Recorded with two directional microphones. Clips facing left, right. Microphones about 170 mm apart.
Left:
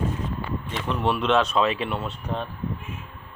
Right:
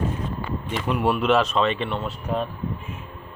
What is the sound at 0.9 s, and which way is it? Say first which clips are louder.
Speech: right 2 dB; 10° right (ahead or behind).